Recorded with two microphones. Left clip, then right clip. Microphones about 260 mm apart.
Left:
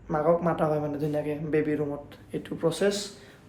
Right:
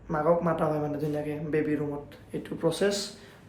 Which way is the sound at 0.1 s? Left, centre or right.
Centre.